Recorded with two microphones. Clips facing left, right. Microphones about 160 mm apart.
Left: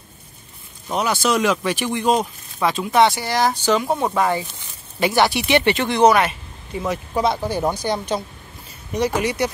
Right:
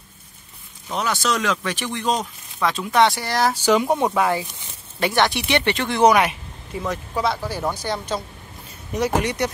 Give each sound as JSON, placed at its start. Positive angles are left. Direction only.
{"t": 0.8, "sound": "speech", "side_deg": 15}
{"t": 4.1, "sound": "speech", "side_deg": 0}
{"t": 6.0, "sound": "speech", "side_deg": -10}
{"t": 6.7, "sound": "speech", "side_deg": 5}
{"t": 7.2, "sound": "speech", "side_deg": 20}
{"t": 8.9, "sound": "speech", "side_deg": 0}